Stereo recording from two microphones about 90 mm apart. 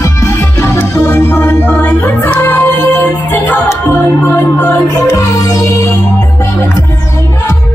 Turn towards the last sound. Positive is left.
turn(degrees=40)  # may be behind; listen again after turning